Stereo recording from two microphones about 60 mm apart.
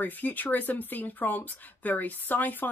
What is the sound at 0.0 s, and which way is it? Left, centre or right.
Speech, left.